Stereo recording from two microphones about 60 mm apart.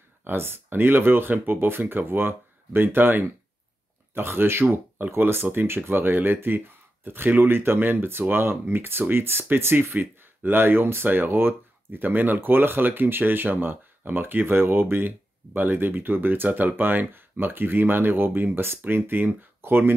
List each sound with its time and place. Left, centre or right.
0.2 s speech: right